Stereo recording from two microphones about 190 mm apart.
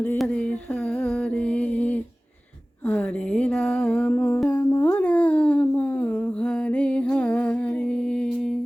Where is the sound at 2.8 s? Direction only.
5° left (ahead or behind).